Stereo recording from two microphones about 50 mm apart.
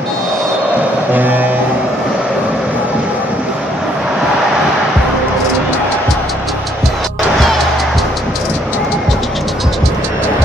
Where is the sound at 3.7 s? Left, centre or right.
Centre.